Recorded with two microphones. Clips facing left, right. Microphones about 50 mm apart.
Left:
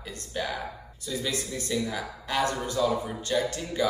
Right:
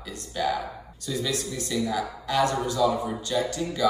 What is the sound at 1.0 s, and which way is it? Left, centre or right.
Speech, centre.